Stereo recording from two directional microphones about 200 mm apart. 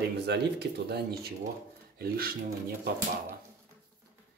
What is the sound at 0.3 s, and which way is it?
Speech, 55° right (ahead or behind).